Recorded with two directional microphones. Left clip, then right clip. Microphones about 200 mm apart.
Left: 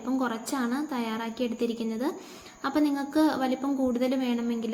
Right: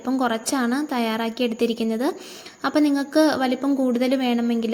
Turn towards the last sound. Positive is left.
turn(degrees=-35)  # may be behind; listen again after turning